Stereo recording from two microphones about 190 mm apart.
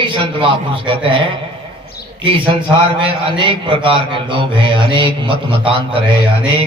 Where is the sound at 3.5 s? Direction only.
25° right (ahead or behind).